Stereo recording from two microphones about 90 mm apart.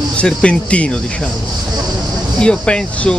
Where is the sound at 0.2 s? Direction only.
15° left (ahead or behind).